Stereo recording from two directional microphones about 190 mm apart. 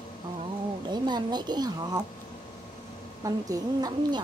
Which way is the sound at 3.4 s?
20° right (ahead or behind).